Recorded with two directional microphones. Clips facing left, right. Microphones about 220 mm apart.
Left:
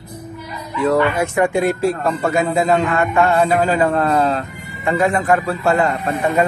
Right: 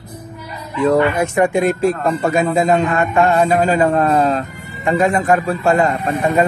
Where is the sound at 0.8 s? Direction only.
15° right (ahead or behind).